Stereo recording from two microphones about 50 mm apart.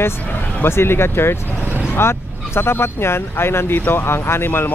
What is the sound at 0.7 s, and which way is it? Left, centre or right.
Speech, left.